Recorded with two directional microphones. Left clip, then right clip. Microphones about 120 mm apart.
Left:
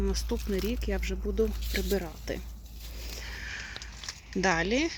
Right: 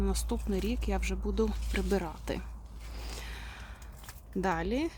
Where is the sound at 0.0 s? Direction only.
20° right (ahead or behind).